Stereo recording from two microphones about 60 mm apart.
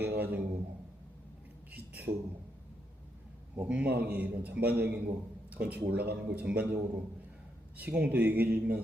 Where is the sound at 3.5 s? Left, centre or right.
Right.